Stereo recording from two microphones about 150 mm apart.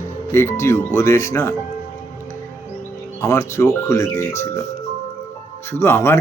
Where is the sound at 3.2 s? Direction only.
20° left (ahead or behind).